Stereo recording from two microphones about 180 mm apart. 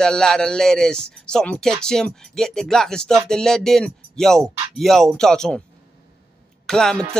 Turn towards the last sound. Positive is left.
turn(degrees=5)  # may be behind; listen again after turning